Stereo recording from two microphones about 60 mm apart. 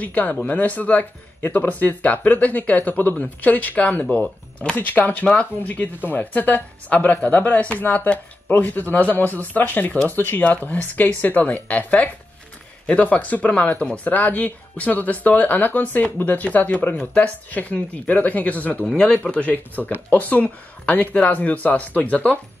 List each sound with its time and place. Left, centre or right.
0.0 s speech: left